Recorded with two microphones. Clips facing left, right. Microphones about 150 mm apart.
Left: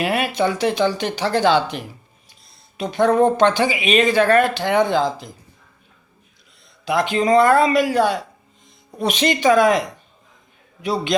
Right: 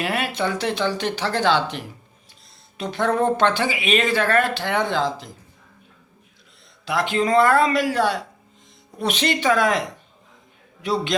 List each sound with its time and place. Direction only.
0.0 s speech: 15° left (ahead or behind)
6.8 s speech: 15° left (ahead or behind)
10.8 s speech: 10° left (ahead or behind)